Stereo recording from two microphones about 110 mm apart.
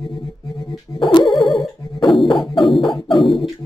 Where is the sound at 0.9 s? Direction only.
30° left (ahead or behind).